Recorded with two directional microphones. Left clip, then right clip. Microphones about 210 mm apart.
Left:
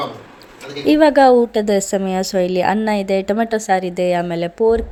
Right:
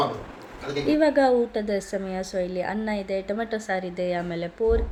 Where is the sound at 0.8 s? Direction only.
45° left (ahead or behind).